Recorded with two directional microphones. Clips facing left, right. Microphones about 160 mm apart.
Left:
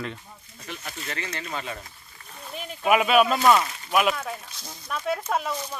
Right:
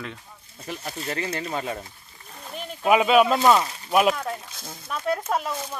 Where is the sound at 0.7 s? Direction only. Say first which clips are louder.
Right 5 dB; 35° right (ahead or behind).